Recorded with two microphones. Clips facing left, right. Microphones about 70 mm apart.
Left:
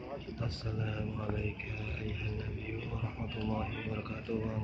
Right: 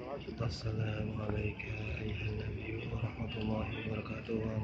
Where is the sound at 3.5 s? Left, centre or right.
Centre.